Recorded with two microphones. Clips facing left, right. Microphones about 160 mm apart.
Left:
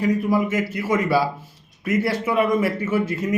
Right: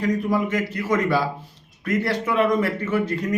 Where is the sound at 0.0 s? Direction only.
5° left (ahead or behind).